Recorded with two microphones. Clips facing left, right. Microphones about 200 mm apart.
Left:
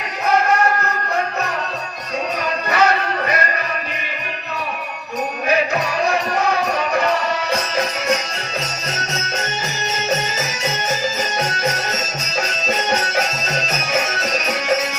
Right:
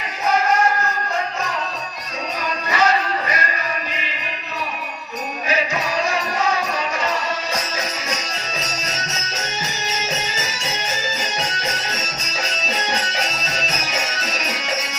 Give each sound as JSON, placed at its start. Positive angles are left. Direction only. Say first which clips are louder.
{"t": 2.6, "sound": "music", "louder": "left 1 dB", "side_deg": 65}
{"t": 5.5, "sound": "music", "louder": "left 3 dB", "side_deg": 60}